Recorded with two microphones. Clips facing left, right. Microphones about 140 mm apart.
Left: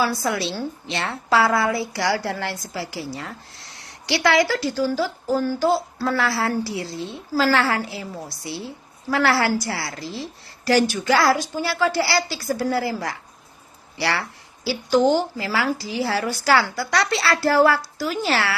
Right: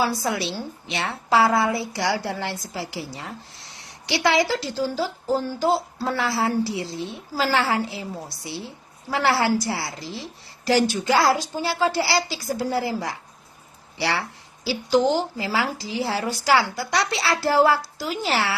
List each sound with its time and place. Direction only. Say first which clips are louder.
0.0 s speech: left 1 dB; 20° right (ahead or behind)